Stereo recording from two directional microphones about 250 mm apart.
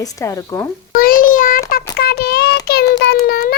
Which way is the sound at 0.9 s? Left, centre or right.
Left.